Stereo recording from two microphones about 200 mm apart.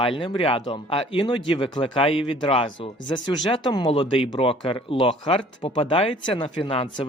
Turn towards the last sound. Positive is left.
turn(degrees=25)  # may be behind; listen again after turning